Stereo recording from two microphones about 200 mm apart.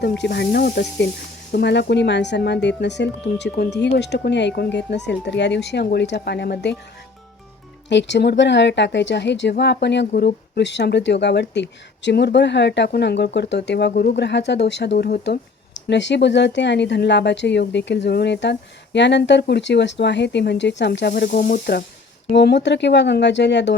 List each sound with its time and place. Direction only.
0.2 s speech: 60° left (ahead or behind)
7.9 s speech: 60° left (ahead or behind)
21.1 s speech: 45° left (ahead or behind)